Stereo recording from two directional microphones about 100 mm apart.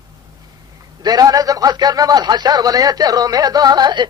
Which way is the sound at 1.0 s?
40° right (ahead or behind).